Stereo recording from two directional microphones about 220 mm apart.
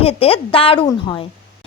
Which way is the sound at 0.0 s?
25° left (ahead or behind).